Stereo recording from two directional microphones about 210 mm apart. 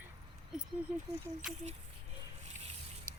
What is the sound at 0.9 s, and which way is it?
Speech, 5° right (ahead or behind).